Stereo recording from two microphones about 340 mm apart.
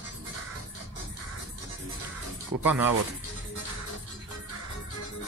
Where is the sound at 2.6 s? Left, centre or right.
Centre.